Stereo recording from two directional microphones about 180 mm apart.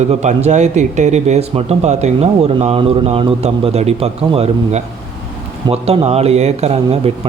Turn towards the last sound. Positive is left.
turn(degrees=-35)  # may be behind; listen again after turning